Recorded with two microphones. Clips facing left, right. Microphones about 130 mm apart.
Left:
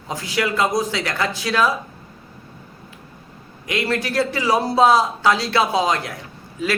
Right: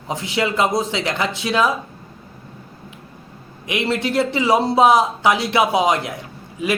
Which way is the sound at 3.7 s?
20° right (ahead or behind).